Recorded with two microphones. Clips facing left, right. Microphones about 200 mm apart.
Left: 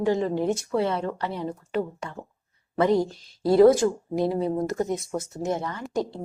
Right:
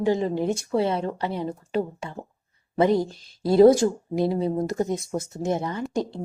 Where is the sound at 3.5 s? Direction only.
25° right (ahead or behind).